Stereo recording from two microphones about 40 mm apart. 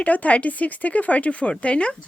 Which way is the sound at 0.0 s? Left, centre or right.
Left.